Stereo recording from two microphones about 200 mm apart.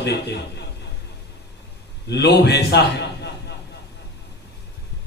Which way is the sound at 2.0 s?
55° left (ahead or behind).